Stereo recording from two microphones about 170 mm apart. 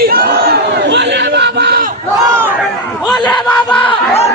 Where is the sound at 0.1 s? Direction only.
60° right (ahead or behind).